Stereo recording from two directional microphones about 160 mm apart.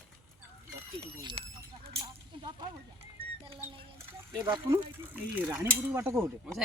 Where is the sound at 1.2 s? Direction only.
30° right (ahead or behind).